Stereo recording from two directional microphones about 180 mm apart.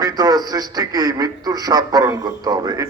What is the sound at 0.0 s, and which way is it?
Speech, 20° right (ahead or behind).